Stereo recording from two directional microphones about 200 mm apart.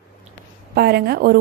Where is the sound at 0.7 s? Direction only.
50° right (ahead or behind).